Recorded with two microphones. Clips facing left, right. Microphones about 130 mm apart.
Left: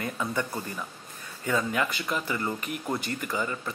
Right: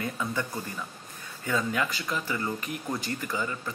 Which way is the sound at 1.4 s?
5° left (ahead or behind).